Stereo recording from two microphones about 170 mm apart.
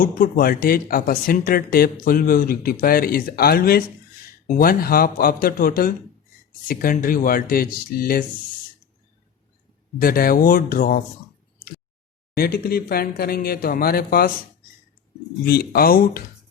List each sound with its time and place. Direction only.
0.0 s speech: 55° left (ahead or behind)
10.0 s speech: 60° left (ahead or behind)
12.4 s speech: 65° left (ahead or behind)
15.4 s speech: 60° left (ahead or behind)